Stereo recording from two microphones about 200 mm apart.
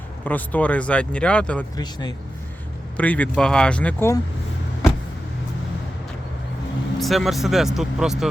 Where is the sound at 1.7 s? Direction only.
20° left (ahead or behind).